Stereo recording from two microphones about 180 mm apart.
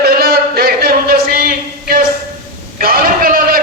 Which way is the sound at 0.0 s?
60° right (ahead or behind).